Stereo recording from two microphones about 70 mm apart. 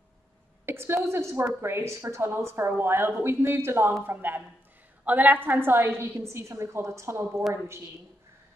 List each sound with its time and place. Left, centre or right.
0.7 s a woman's voice: right